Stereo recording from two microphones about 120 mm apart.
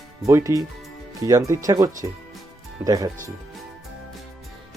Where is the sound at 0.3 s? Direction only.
25° right (ahead or behind).